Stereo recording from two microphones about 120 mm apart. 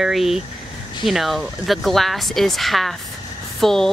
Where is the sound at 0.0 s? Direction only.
5° right (ahead or behind).